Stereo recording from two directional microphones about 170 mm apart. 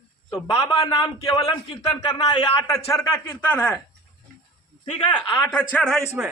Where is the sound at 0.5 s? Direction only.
20° left (ahead or behind).